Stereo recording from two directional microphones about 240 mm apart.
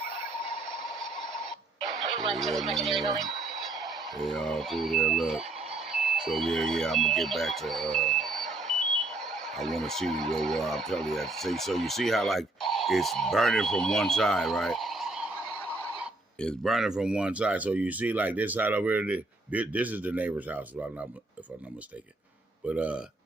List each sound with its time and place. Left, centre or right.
2.4 s speech: centre
22.6 s speech: centre